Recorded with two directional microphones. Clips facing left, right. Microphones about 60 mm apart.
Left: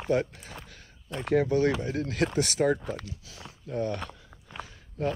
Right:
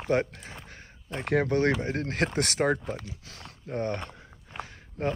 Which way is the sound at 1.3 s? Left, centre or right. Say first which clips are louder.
Left 1 dB; right.